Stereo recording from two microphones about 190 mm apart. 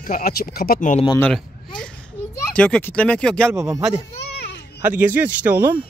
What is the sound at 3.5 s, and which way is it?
Speech, 15° right (ahead or behind).